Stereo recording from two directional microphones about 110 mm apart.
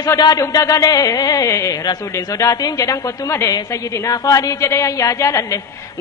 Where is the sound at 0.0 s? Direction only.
35° left (ahead or behind).